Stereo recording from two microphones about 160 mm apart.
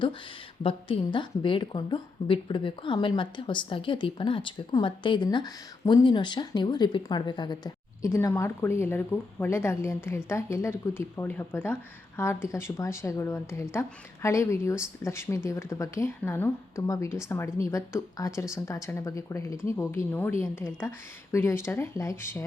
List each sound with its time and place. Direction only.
0.6 s a woman's voice: 35° left (ahead or behind); by 22.4 s 15° left (ahead or behind)